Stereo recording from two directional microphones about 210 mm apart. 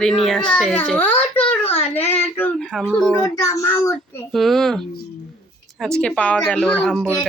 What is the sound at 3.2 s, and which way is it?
Speech, 15° left (ahead or behind).